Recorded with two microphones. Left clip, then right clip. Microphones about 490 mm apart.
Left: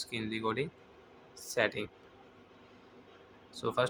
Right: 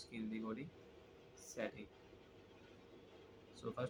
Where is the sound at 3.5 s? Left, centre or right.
Centre.